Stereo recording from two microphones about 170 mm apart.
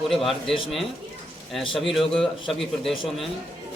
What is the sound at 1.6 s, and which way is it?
Speech, 30° left (ahead or behind).